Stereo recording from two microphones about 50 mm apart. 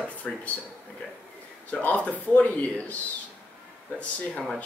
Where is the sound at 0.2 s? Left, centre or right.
Left.